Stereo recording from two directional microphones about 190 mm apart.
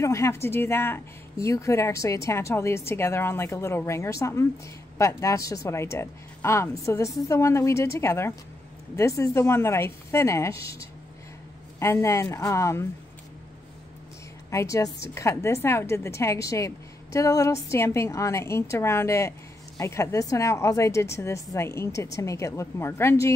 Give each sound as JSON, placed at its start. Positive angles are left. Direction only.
{"t": 0.0, "sound": "a woman's voice", "side_deg": 15}
{"t": 14.5, "sound": "a woman's voice", "side_deg": 15}